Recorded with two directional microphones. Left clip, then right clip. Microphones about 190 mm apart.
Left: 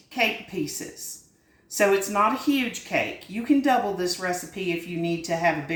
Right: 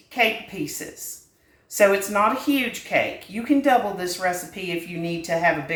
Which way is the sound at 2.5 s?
15° right (ahead or behind).